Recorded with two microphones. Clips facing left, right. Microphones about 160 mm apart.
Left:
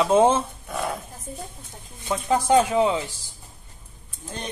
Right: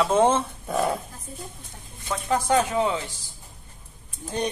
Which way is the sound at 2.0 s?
15° left (ahead or behind).